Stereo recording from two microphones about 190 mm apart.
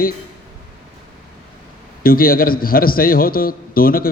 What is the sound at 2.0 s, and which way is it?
A man's voice, 50° left (ahead or behind).